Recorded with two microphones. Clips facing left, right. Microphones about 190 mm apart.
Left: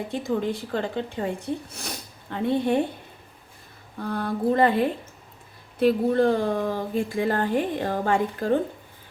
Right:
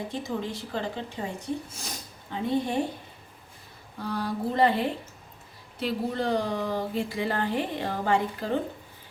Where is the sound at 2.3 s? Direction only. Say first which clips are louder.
Left 4 dB; 60° left (ahead or behind).